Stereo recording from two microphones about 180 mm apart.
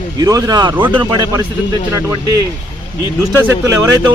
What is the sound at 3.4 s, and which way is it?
Speech, 15° right (ahead or behind).